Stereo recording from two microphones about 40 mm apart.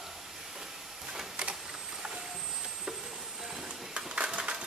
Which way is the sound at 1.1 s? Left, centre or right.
Right.